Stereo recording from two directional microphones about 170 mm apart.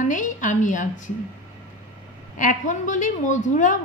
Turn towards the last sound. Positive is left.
turn(degrees=50)  # may be behind; listen again after turning